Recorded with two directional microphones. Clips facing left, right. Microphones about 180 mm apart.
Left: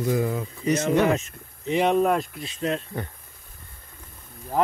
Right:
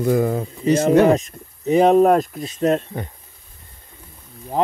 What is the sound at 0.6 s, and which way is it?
Speech, 35° right (ahead or behind).